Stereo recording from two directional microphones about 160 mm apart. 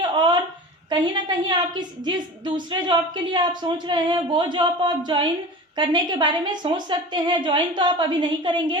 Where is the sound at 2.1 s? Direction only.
30° right (ahead or behind).